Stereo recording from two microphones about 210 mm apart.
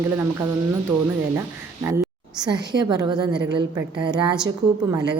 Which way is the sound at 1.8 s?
15° right (ahead or behind).